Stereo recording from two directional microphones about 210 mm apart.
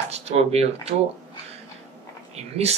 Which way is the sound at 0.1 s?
30° right (ahead or behind).